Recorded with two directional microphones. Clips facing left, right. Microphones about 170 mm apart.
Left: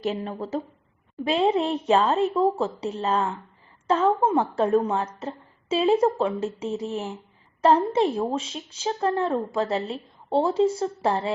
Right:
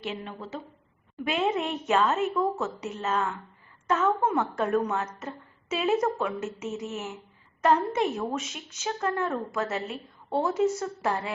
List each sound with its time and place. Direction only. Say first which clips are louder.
0.0 s a woman's voice: left 7 dB; 40° left (ahead or behind)